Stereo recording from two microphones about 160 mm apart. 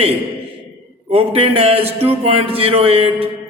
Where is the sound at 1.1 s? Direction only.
35° right (ahead or behind).